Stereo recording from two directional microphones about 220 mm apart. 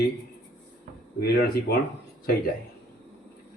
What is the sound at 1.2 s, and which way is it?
Speech, 45° left (ahead or behind).